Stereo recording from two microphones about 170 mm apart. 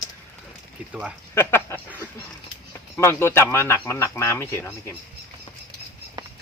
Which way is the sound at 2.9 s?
15° left (ahead or behind).